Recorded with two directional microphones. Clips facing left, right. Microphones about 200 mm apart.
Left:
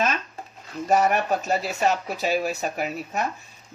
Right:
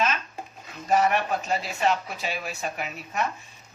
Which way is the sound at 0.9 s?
45° left (ahead or behind).